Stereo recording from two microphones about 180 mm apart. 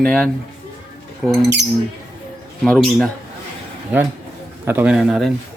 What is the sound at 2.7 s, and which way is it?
Speech, 5° left (ahead or behind).